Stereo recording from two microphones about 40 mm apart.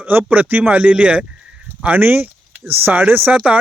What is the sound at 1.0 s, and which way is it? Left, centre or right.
Speech, right.